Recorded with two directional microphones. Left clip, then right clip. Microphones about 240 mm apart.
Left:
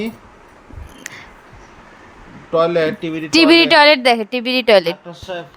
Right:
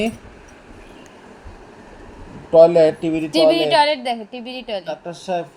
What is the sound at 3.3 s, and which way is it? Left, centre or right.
A woman's voice, left.